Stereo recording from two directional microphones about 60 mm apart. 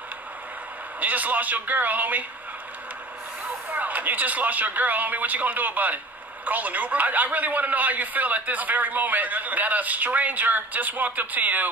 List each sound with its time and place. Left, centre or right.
1.0 s a man's voice: right
3.7 s a man's voice: right